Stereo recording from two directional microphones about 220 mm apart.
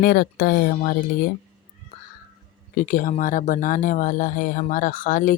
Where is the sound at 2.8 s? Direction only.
40° left (ahead or behind).